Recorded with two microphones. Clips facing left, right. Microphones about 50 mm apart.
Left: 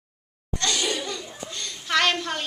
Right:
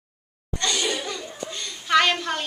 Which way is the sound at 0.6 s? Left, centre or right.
Centre.